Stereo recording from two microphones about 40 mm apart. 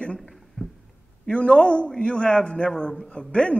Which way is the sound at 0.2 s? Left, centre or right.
Centre.